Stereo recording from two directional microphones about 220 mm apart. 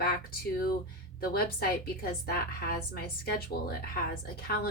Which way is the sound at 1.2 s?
45° left (ahead or behind).